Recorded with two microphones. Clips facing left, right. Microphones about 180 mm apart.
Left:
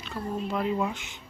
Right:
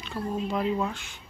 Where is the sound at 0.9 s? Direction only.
20° left (ahead or behind).